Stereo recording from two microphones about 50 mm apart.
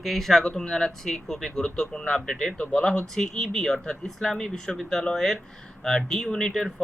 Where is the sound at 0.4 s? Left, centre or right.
Centre.